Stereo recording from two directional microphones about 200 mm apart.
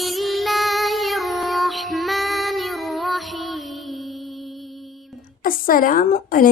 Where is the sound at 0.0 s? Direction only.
Centre (ahead or behind).